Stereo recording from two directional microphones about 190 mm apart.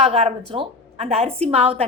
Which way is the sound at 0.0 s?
30° right (ahead or behind).